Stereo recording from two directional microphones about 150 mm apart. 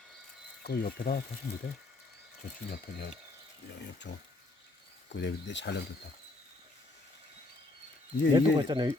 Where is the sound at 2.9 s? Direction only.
90° left.